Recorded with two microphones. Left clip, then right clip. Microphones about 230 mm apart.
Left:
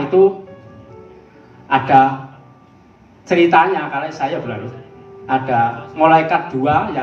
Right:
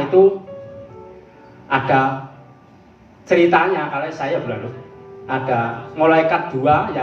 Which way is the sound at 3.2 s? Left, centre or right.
Left.